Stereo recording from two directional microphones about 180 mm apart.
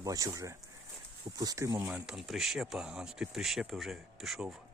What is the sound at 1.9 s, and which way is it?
Speech, 5° right (ahead or behind).